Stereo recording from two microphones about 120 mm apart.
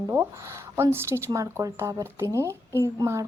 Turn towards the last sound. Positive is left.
turn(degrees=-25)  # may be behind; listen again after turning